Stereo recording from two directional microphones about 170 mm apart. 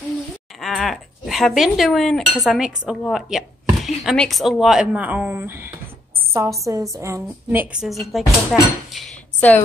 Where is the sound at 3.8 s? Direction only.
Centre (ahead or behind).